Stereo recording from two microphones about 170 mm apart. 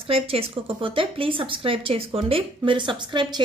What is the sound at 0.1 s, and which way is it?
A woman's voice, 35° right (ahead or behind).